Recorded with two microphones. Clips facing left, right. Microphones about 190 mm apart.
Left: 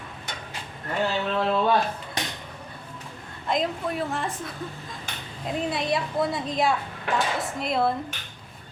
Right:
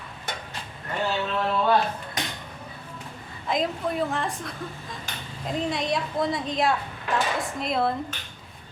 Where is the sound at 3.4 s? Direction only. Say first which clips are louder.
Even; centre (ahead or behind).